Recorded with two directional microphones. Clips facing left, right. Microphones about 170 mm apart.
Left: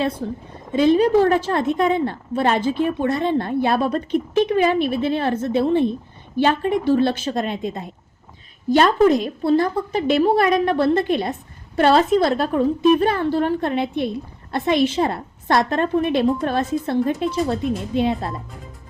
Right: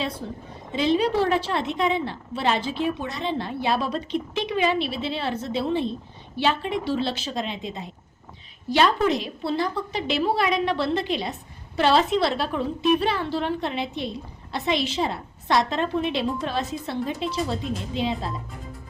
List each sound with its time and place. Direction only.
0.7 s a woman's voice: 50° left (ahead or behind)